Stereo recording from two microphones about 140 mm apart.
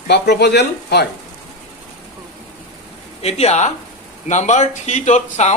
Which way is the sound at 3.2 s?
50° left (ahead or behind).